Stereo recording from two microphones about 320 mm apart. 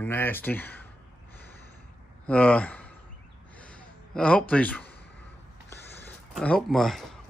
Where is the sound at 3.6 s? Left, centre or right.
Centre.